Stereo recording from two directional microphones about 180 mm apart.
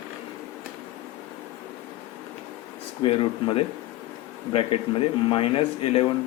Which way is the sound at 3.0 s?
30° left (ahead or behind).